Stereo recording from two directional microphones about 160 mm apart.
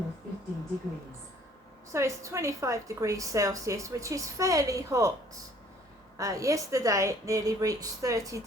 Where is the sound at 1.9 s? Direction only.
20° right (ahead or behind).